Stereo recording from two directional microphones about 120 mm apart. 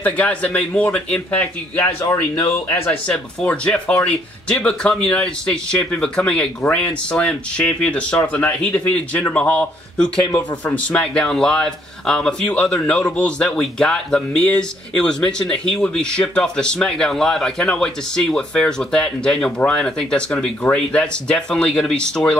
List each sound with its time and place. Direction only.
0.0 s speech: 10° left (ahead or behind)
1.8 s speech: 20° left (ahead or behind)
3.1 s speech: 5° left (ahead or behind)